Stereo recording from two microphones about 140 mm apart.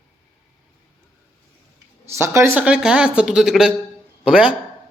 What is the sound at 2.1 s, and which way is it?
Speech, 20° right (ahead or behind).